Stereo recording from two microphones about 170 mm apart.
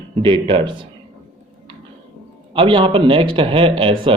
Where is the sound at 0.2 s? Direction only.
30° right (ahead or behind).